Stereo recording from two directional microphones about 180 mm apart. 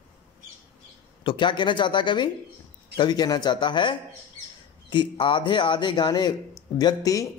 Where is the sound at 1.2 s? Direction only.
25° left (ahead or behind).